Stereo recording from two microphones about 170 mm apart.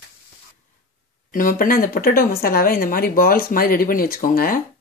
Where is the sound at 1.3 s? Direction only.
55° left (ahead or behind).